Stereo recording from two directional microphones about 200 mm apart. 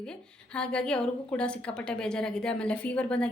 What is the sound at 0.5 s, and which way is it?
A woman's voice, 5° left (ahead or behind).